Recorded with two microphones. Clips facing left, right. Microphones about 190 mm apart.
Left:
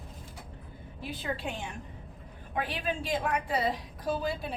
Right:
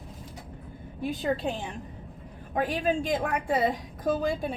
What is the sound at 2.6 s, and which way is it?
A woman's voice, 45° right (ahead or behind).